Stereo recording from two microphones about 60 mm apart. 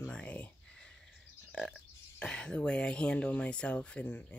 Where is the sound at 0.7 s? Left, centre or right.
Centre.